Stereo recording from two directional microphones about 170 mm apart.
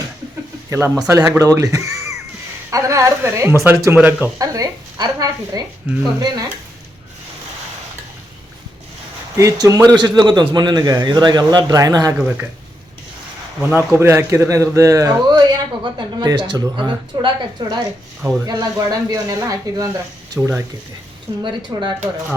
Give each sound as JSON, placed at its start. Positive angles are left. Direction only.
{"t": 0.7, "sound": "speech", "side_deg": -15}
{"t": 4.4, "sound": "a man's voice", "side_deg": -20}
{"t": 9.4, "sound": "a man's voice", "side_deg": -20}
{"t": 13.6, "sound": "a man's voice", "side_deg": -15}
{"t": 21.4, "sound": "a man's voice", "side_deg": -25}